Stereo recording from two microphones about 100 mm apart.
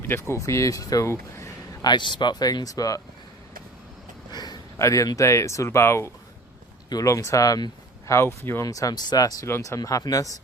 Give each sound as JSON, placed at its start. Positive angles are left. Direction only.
{"t": 0.1, "sound": "speech", "side_deg": 25}
{"t": 1.8, "sound": "speech", "side_deg": 50}
{"t": 4.3, "sound": "a sound", "side_deg": 45}
{"t": 4.8, "sound": "speech", "side_deg": 30}
{"t": 8.6, "sound": "speech", "side_deg": 35}